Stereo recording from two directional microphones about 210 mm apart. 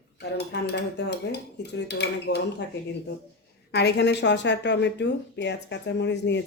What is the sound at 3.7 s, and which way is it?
Speech, 50° left (ahead or behind).